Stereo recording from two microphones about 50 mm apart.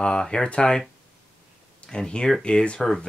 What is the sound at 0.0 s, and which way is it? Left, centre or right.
Speech, centre.